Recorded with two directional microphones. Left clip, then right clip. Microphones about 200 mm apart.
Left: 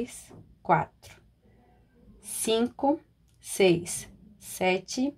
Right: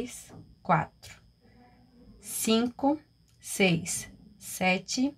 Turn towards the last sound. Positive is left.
turn(degrees=25)  # may be behind; listen again after turning